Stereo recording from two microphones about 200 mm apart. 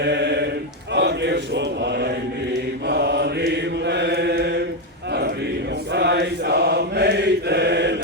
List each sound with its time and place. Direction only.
0.0 s a sound: 55° right (ahead or behind)
0.9 s mantra: 60° right (ahead or behind)
5.9 s mantra: 55° right (ahead or behind)